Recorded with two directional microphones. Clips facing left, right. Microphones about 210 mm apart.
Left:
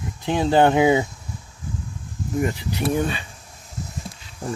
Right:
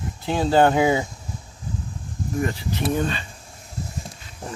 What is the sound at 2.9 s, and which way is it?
Speech, 10° left (ahead or behind).